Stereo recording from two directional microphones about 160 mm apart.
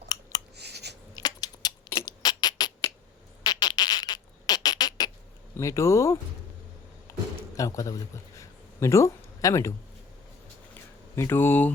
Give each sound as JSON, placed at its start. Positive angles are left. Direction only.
{"t": 0.5, "sound": "a sound", "side_deg": -90}
{"t": 1.1, "sound": "rodents", "side_deg": 25}
{"t": 3.4, "sound": "a sound", "side_deg": 25}
{"t": 5.5, "sound": "speech", "side_deg": 20}
{"t": 7.5, "sound": "speech", "side_deg": 20}
{"t": 11.1, "sound": "speech", "side_deg": 15}